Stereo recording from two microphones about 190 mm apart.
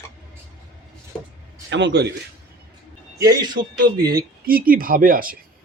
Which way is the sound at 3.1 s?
20° right (ahead or behind).